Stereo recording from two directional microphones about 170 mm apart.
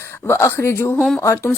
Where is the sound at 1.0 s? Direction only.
Centre (ahead or behind).